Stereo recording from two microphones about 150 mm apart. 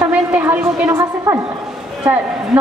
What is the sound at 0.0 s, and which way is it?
A woman's voice, 5° right (ahead or behind).